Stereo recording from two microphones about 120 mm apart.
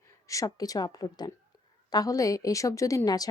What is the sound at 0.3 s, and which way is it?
A woman's voice, 30° left (ahead or behind).